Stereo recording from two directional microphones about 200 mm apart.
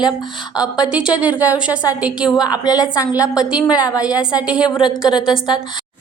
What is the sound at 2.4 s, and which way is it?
A woman's voice, 20° left (ahead or behind).